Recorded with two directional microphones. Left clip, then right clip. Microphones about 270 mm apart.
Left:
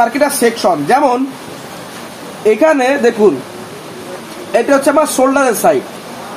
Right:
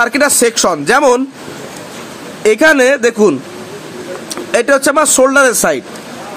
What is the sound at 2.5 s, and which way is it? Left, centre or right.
Speech, right.